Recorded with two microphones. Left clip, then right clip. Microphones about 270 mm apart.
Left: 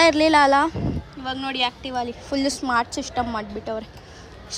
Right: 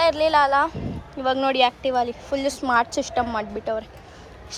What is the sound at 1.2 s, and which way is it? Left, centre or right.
A woman's voice, centre.